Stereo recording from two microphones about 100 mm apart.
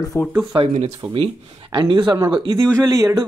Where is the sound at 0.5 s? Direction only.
90° right.